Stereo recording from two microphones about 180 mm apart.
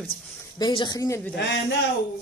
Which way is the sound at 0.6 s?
25° left (ahead or behind).